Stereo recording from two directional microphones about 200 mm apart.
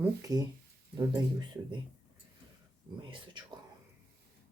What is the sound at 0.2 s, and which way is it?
Speech, 20° right (ahead or behind).